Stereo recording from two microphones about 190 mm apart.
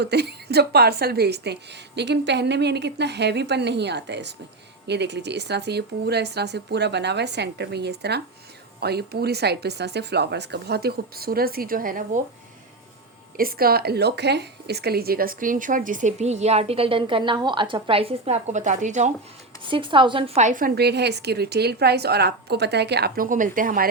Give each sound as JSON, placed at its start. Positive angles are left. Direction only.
{"t": 0.0, "sound": "a woman's voice", "side_deg": -60}
{"t": 13.3, "sound": "speech", "side_deg": -50}
{"t": 19.6, "sound": "a woman's voice", "side_deg": -25}